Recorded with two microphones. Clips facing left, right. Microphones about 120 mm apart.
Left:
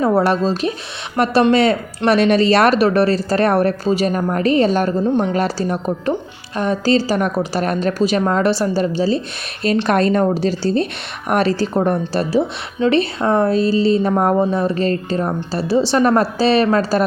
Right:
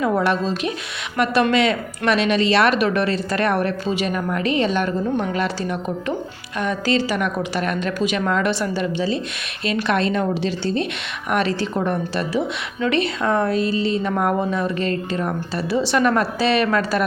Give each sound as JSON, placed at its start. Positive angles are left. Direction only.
{"t": 0.0, "sound": "speech", "side_deg": 35}